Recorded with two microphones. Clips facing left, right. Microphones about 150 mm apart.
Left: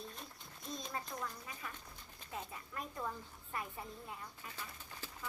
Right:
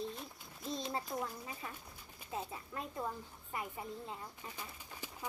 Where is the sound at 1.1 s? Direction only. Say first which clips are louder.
Right 6 dB; 30° right (ahead or behind).